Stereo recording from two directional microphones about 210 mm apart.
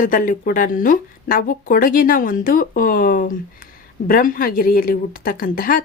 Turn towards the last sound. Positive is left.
turn(degrees=40)  # may be behind; listen again after turning